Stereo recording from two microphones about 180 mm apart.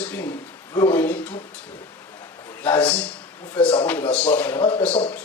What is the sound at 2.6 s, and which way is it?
A man's voice, 10° left (ahead or behind).